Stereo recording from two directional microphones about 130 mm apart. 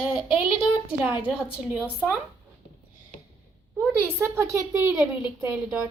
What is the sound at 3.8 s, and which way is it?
A woman's voice, 15° right (ahead or behind).